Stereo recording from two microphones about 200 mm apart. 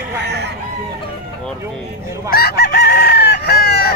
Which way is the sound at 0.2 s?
55° right (ahead or behind).